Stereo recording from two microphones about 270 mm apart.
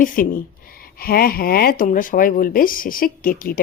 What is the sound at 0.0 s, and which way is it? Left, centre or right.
A woman's voice, left.